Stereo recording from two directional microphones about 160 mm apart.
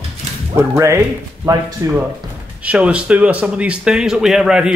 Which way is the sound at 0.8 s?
20° right (ahead or behind).